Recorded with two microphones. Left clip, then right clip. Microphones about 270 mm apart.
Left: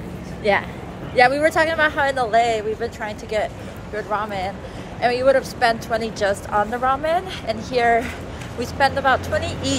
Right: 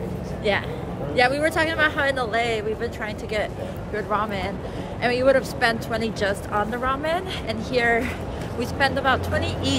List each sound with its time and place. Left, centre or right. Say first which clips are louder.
0.4 s speech: left 4 dB; centre